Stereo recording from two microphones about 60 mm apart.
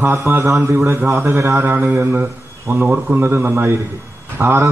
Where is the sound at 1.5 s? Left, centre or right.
Right.